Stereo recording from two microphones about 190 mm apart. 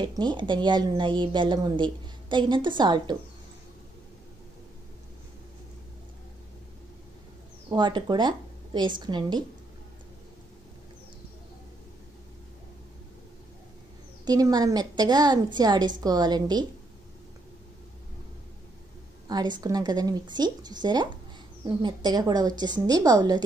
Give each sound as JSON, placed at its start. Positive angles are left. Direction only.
{"t": 0.2, "sound": "a woman's voice", "side_deg": -25}
{"t": 7.7, "sound": "a woman's voice", "side_deg": -25}
{"t": 14.2, "sound": "a woman's voice", "side_deg": -20}
{"t": 19.2, "sound": "a woman's voice", "side_deg": -20}